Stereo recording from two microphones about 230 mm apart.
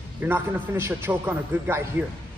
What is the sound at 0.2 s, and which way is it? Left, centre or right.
A man's voice, centre.